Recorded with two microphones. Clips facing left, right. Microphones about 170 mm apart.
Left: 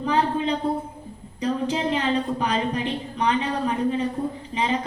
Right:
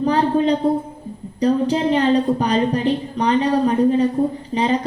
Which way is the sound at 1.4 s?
35° right (ahead or behind).